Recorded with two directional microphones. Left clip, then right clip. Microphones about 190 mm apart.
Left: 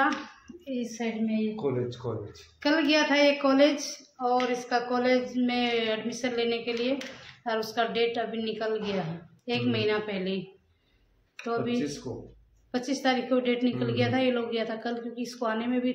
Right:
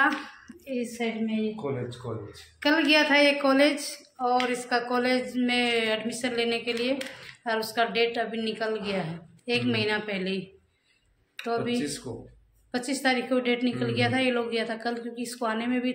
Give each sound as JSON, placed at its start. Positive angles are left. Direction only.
{"t": 0.5, "sound": "a sound", "side_deg": 0}
{"t": 1.6, "sound": "speech", "side_deg": 50}
{"t": 2.6, "sound": "a woman's voice", "side_deg": -10}
{"t": 11.4, "sound": "a woman's voice", "side_deg": -5}